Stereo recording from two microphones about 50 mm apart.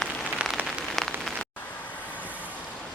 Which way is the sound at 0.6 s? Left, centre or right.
Right.